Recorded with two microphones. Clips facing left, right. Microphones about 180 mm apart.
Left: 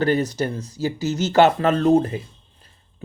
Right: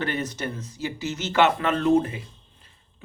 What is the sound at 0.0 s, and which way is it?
Speech, 35° left (ahead or behind).